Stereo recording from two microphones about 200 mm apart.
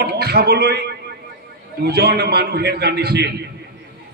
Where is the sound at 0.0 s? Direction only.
55° right (ahead or behind).